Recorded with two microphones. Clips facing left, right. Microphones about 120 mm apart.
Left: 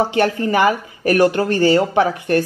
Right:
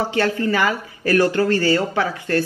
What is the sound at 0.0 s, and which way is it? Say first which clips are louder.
Speech: left 3 dB; 20° left (ahead or behind).